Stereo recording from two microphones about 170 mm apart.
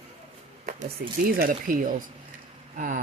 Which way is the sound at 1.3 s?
55° right (ahead or behind).